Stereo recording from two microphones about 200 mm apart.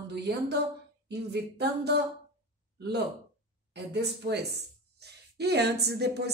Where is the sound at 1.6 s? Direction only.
55° right (ahead or behind).